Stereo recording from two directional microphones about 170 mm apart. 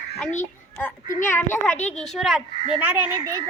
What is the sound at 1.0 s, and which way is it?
Speech, 50° left (ahead or behind).